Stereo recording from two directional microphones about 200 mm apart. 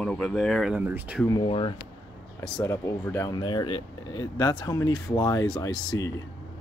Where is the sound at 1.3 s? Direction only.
25° left (ahead or behind).